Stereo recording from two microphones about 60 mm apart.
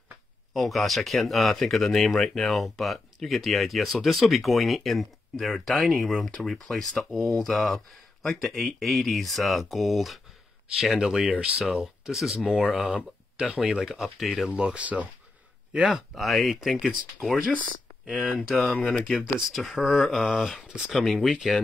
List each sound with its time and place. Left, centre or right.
0.5 s speech: centre
14.5 s speech: centre
15.9 s speech: centre
18.5 s speech: centre
19.1 s speech: centre
19.5 s speech: centre